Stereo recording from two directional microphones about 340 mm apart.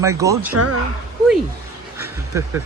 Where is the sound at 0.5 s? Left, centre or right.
Right.